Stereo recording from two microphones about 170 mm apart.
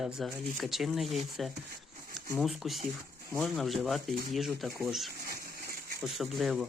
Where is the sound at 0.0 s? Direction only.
Centre (ahead or behind).